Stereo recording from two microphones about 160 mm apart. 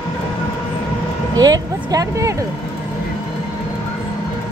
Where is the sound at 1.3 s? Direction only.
25° right (ahead or behind).